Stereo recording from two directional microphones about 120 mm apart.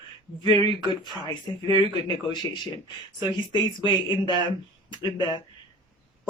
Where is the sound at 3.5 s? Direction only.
40° left (ahead or behind).